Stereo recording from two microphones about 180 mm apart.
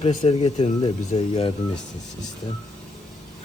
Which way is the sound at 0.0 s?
30° left (ahead or behind).